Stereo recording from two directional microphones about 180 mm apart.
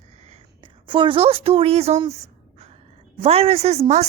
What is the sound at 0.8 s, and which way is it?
A woman's voice, 25° right (ahead or behind).